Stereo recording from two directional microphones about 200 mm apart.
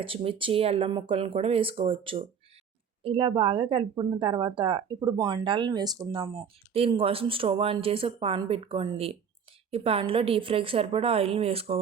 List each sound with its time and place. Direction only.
0.0 s speech: 25° right (ahead or behind)